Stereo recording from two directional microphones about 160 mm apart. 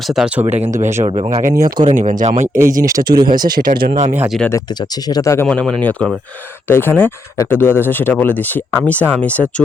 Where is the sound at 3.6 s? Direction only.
70° right (ahead or behind).